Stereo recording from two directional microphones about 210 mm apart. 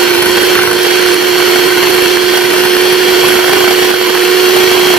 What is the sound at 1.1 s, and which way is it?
Blender, centre (ahead or behind).